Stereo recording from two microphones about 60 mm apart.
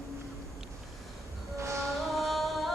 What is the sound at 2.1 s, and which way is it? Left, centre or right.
Music, centre.